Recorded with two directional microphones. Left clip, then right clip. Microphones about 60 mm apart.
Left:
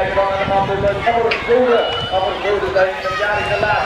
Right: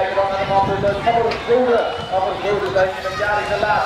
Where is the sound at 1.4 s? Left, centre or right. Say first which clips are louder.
Left 2 dB; left.